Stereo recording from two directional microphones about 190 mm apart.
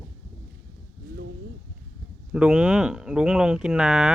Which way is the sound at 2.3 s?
5° right (ahead or behind).